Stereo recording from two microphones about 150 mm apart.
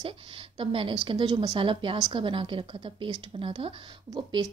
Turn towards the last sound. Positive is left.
turn(degrees=-30)  # may be behind; listen again after turning